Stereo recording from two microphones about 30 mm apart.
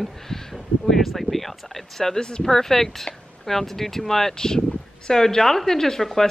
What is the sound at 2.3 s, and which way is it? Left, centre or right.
Speech, left.